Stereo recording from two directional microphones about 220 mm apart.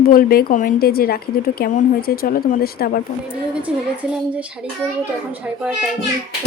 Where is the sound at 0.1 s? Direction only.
40° left (ahead or behind).